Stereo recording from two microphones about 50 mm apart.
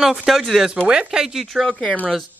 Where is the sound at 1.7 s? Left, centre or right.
Centre.